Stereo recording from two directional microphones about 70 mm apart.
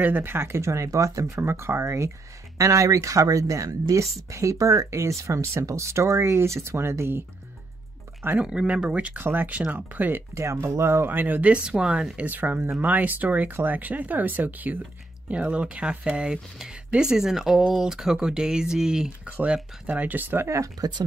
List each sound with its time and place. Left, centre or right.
0.0 s speech: right
1.4 s speech: right
8.5 s speech: centre
10.3 s speech: right